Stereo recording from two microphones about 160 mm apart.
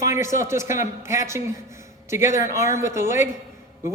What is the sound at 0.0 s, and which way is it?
A man's voice, 15° right (ahead or behind).